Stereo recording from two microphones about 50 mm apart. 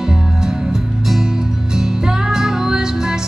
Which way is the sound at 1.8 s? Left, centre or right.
Centre.